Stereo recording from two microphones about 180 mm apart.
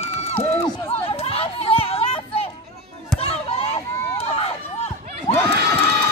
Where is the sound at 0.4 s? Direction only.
30° left (ahead or behind).